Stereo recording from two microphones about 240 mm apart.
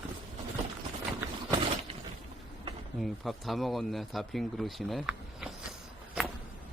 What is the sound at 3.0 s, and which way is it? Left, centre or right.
Speech, centre.